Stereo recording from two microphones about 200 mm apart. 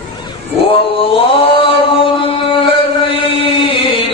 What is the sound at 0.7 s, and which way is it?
Mantra, 25° left (ahead or behind).